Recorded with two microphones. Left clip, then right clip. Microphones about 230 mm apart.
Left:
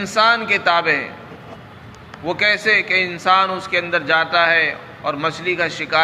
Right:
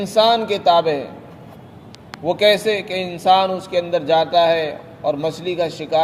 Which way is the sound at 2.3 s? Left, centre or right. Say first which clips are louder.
Even; right.